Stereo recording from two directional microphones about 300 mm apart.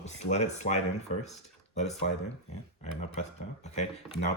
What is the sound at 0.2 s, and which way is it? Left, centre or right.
Speech, left.